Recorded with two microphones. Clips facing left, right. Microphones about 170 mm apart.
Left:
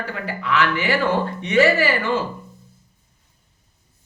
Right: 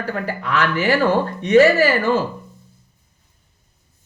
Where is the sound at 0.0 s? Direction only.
40° right (ahead or behind).